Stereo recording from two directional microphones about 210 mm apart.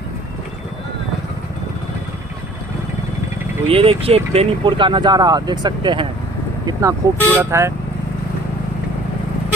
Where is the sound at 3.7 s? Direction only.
25° right (ahead or behind).